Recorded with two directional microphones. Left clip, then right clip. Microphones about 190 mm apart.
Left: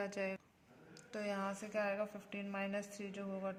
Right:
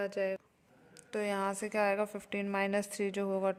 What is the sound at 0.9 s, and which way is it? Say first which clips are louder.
A woman's voice: right 7 dB; 45° right (ahead or behind).